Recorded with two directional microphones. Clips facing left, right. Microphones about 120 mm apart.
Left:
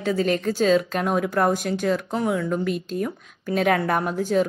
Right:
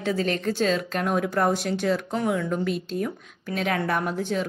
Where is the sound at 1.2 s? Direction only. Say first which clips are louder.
Left 2 dB; 45° left (ahead or behind).